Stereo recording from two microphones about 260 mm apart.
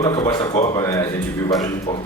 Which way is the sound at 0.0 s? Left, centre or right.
Centre.